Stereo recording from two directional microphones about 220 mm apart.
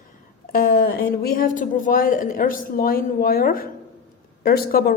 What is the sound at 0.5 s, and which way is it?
A woman's voice, 40° left (ahead or behind).